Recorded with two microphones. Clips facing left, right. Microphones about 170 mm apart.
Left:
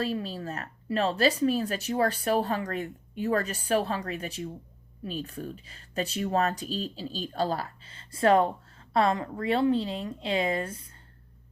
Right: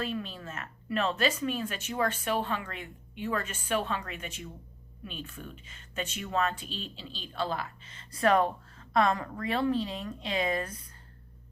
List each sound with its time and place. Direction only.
0.0 s a woman's voice: 35° left (ahead or behind)